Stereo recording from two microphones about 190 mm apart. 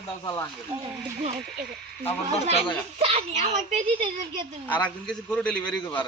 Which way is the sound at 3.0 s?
30° right (ahead or behind).